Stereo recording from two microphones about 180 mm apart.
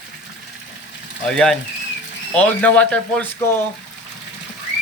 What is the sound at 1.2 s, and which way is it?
Speech, 5° left (ahead or behind).